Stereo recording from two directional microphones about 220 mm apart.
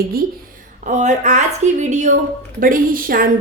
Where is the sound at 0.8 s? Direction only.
35° right (ahead or behind).